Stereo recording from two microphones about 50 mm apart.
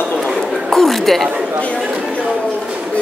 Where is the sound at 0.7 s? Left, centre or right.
Centre.